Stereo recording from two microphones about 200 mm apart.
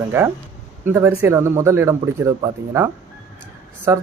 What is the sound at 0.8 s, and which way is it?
A man's voice, 10° right (ahead or behind).